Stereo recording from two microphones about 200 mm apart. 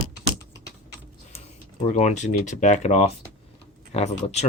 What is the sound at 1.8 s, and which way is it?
Speech, 35° left (ahead or behind).